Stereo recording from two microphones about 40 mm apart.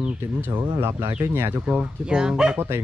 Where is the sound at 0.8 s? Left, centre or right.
Right.